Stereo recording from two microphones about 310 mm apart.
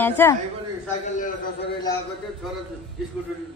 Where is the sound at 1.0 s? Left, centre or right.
Left.